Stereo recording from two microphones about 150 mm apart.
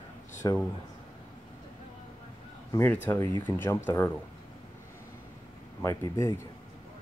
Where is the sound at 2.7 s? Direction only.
15° left (ahead or behind).